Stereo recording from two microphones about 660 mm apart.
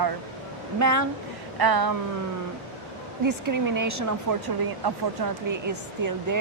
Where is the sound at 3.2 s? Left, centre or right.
Right.